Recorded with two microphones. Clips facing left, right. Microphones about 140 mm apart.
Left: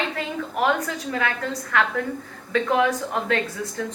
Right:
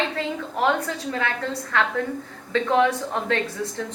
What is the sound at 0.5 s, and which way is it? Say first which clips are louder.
A woman's voice: even; 25° right (ahead or behind).